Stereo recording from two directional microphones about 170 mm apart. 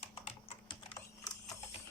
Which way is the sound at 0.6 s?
30° left (ahead or behind).